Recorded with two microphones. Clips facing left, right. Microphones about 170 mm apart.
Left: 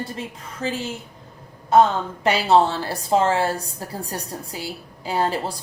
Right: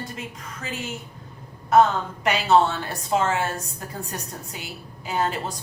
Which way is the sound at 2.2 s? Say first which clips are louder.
Left 2 dB; 30° left (ahead or behind).